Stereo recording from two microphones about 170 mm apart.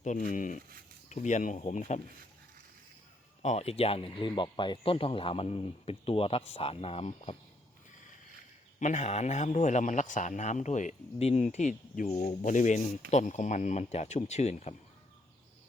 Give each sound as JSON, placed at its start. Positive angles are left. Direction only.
{"t": 0.0, "sound": "a man's voice", "side_deg": 45}
{"t": 3.4, "sound": "speech", "side_deg": 40}
{"t": 8.8, "sound": "a man's voice", "side_deg": 45}